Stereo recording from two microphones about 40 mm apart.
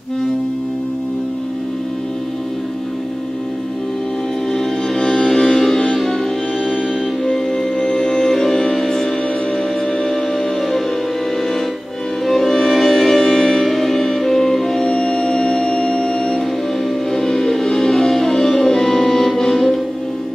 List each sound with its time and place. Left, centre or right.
4.6 s music: centre
7.2 s music: centre
12.3 s music: centre